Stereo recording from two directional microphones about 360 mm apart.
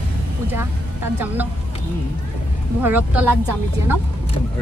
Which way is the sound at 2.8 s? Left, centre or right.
Centre.